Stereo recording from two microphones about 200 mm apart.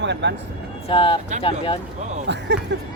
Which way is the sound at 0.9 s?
25° left (ahead or behind).